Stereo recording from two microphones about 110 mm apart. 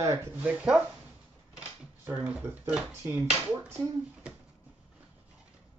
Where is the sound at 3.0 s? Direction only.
20° right (ahead or behind).